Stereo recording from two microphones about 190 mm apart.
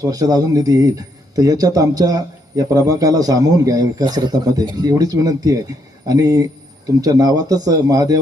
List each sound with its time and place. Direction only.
0.0 s speech: 20° right (ahead or behind)